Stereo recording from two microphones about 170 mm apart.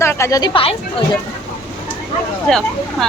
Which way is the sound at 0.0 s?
15° left (ahead or behind).